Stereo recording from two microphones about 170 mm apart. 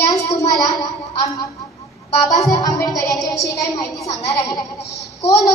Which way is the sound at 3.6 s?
20° left (ahead or behind).